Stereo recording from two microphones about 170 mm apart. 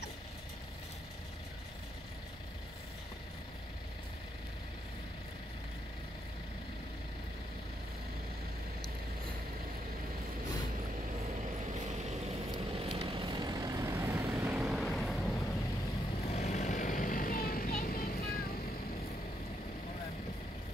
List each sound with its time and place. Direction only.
12.4 s vehicle: 30° right (ahead or behind); by 15.3 s centre (ahead or behind)
16.3 s vehicle: 45° left (ahead or behind); by 18.3 s 60° left (ahead or behind)